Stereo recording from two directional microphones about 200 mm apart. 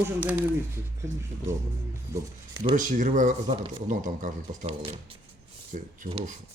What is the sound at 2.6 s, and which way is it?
Speech, 35° right (ahead or behind).